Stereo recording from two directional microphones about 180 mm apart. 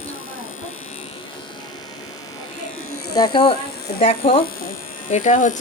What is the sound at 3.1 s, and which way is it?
Speech, 25° left (ahead or behind).